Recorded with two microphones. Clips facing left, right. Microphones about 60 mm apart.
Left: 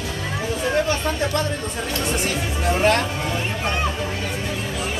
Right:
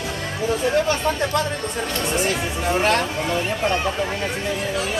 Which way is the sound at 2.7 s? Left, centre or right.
Centre.